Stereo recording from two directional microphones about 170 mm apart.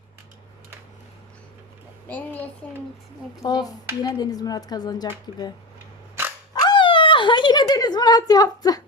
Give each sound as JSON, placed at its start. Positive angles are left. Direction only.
{"t": 2.0, "sound": "a woman's voice", "side_deg": 10}
{"t": 3.4, "sound": "speech", "side_deg": 20}
{"t": 6.5, "sound": "a sound", "side_deg": 25}